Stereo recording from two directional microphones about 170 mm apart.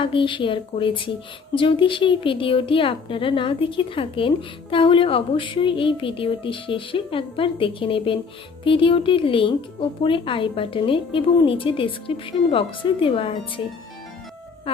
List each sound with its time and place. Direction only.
0.0 s a woman's voice: 30° left (ahead or behind)